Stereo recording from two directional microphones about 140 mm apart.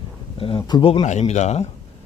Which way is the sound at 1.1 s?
55° left (ahead or behind).